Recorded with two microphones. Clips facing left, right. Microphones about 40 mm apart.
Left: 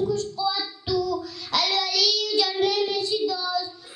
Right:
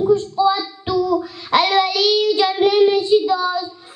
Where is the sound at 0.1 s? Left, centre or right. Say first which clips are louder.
Right 10 dB; right.